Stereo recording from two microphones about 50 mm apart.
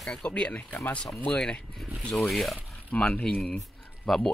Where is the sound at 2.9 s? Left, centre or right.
Left.